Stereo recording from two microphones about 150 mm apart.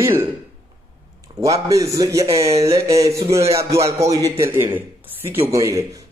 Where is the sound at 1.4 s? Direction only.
20° right (ahead or behind).